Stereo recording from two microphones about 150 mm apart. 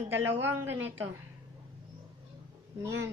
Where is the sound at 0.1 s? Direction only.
15° right (ahead or behind).